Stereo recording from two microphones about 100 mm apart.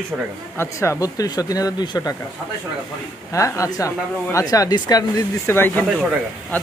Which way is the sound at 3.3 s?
35° left (ahead or behind).